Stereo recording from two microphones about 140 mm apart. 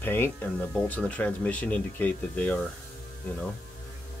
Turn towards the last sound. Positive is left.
turn(degrees=15)  # may be behind; listen again after turning